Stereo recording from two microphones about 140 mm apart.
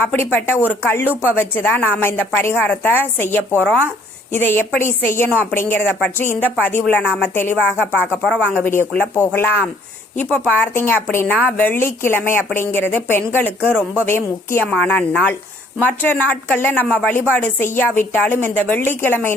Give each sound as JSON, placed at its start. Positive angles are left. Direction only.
{"t": 0.1, "sound": "speech", "side_deg": 10}